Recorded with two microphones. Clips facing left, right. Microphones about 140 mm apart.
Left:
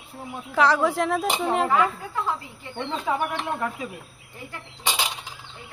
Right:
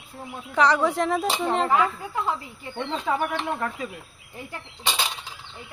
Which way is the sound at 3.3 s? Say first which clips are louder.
Even; 5° left (ahead or behind).